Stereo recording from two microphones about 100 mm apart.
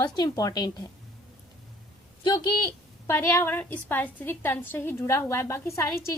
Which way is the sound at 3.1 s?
25° left (ahead or behind).